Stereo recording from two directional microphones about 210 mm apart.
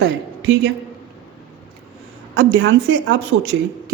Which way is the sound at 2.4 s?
60° right (ahead or behind).